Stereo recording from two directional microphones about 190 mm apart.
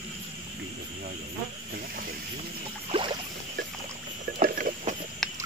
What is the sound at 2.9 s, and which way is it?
Rowboat, 25° right (ahead or behind).